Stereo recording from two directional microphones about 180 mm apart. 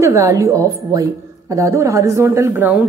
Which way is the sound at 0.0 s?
15° right (ahead or behind).